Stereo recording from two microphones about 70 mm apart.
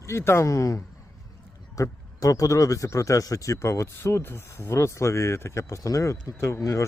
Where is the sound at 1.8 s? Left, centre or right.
Left.